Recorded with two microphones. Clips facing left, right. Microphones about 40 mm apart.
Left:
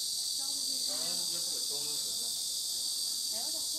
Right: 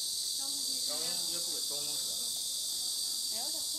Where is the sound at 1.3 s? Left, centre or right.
Right.